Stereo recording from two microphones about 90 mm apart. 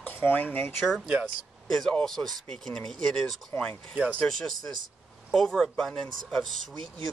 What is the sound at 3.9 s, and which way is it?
Speech, 20° right (ahead or behind).